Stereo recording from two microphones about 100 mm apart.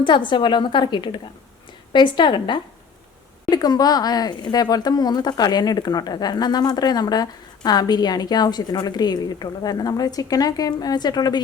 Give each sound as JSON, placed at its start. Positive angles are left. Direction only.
{"t": 0.0, "sound": "speech", "side_deg": 50}